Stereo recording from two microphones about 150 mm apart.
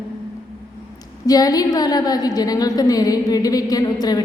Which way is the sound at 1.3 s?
25° left (ahead or behind).